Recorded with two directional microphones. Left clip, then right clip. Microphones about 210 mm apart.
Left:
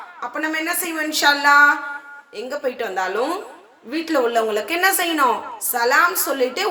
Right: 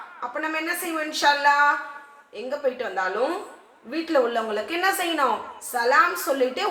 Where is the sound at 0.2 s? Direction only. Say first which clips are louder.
Left 4 dB; 40° left (ahead or behind).